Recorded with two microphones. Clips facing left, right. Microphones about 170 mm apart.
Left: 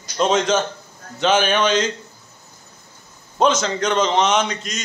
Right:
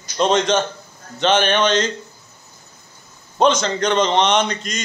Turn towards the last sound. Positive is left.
turn(degrees=5)  # may be behind; listen again after turning